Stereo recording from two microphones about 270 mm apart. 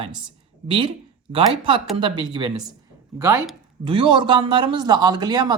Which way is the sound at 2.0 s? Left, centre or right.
Centre.